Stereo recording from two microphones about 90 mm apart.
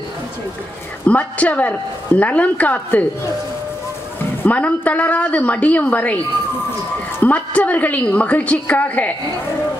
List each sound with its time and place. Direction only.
1.0 s a woman's voice: 15° left (ahead or behind)
4.4 s a woman's voice: 15° left (ahead or behind)